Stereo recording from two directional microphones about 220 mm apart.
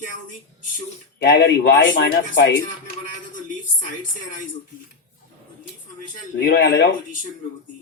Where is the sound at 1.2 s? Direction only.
50° left (ahead or behind).